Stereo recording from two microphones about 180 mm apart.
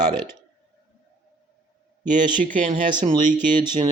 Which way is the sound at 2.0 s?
45° right (ahead or behind).